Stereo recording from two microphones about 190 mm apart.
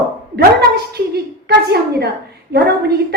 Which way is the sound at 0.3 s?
55° right (ahead or behind).